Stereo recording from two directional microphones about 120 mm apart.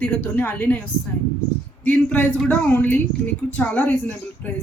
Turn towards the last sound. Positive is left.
turn(degrees=15)  # may be behind; listen again after turning